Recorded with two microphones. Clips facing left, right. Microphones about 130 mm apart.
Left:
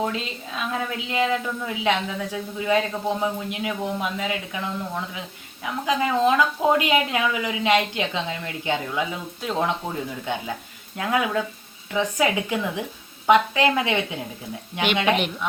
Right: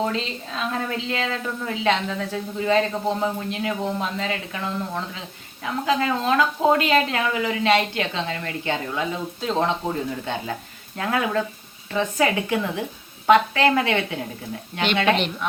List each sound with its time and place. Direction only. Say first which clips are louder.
0.0 s a woman's voice: right 2 dB; 10° left (ahead or behind)
10.9 s a woman's voice: even; 10° left (ahead or behind)